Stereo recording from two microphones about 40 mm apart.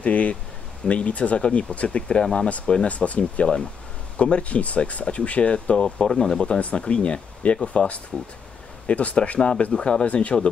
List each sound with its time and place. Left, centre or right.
0.0 s speech: left
2.9 s speech: left
5.8 s speech: centre
6.6 s speech: left
10.0 s speech: left